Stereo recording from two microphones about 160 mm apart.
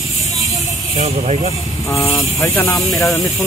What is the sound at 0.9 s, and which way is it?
Speech, 45° right (ahead or behind).